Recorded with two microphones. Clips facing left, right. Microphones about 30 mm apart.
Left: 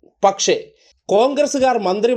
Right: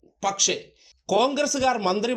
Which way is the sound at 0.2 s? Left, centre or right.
Centre.